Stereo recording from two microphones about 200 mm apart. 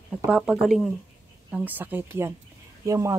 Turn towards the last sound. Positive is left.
turn(degrees=-15)  # may be behind; listen again after turning